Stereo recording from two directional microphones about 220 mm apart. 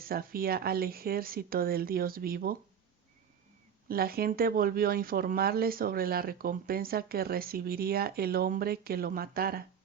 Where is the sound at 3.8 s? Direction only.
45° right (ahead or behind).